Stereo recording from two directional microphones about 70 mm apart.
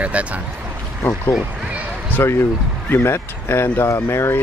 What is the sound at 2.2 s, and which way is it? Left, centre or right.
Speech, left.